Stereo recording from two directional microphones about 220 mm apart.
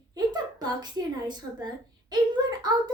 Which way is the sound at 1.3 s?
20° right (ahead or behind).